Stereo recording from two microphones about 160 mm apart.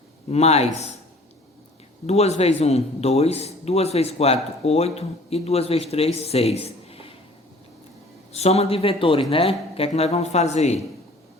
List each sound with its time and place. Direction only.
0.3 s a man's voice: 40° left (ahead or behind)
2.0 s a man's voice: 40° left (ahead or behind)
8.3 s a man's voice: 40° left (ahead or behind)